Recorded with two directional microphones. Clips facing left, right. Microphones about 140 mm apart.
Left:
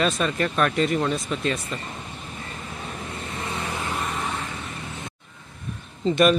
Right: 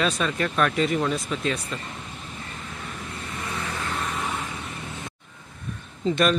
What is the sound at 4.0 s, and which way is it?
Vehicle, centre (ahead or behind).